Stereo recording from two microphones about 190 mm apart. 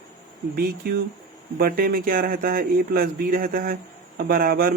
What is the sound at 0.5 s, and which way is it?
Speech, 55° right (ahead or behind).